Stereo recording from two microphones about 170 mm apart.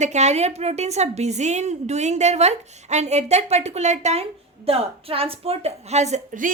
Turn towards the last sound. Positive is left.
turn(degrees=-45)  # may be behind; listen again after turning